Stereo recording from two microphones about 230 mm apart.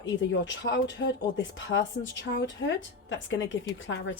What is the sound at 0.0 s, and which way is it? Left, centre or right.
A woman's voice, left.